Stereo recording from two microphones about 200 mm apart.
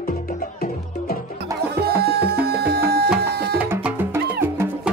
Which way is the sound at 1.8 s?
55° right (ahead or behind).